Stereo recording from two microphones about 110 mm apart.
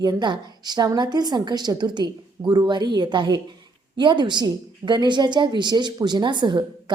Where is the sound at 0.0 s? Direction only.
40° right (ahead or behind).